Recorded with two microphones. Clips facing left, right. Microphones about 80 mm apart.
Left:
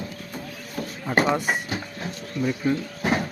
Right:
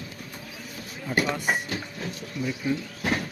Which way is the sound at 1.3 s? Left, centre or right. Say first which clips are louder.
Left 3 dB; left.